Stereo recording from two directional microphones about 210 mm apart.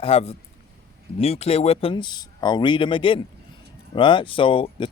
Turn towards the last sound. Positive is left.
turn(degrees=25)  # may be behind; listen again after turning